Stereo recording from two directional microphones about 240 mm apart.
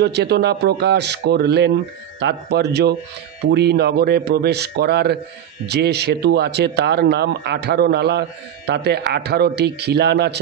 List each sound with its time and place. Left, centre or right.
0.0 s speech: right